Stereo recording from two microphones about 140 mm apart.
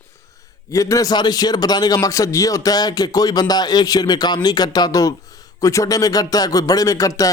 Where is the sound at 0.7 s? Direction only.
25° left (ahead or behind).